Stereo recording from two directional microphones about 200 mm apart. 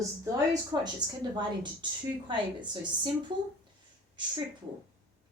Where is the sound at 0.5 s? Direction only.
20° right (ahead or behind).